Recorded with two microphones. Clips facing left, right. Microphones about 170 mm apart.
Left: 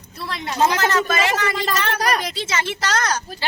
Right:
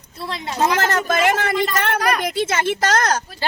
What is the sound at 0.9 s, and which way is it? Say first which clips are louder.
Speech: right 2 dB; 50° right (ahead or behind).